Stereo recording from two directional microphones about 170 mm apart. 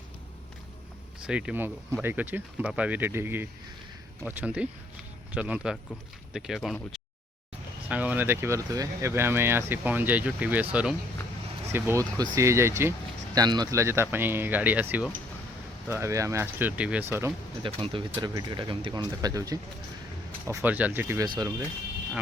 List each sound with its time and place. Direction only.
1.2 s speech: 5° right (ahead or behind)
7.9 s speech: 10° right (ahead or behind)
17.6 s speech: 30° right (ahead or behind)
20.6 s speech: 10° right (ahead or behind)